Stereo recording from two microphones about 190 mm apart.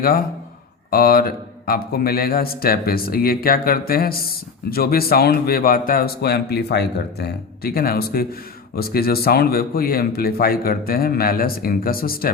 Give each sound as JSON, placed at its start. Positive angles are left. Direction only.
{"t": 0.9, "sound": "speech", "side_deg": 50}